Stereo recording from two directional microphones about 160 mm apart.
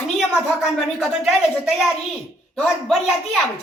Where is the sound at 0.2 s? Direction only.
Centre (ahead or behind).